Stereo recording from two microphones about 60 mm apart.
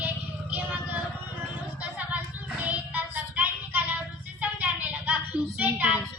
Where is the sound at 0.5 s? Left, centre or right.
Right.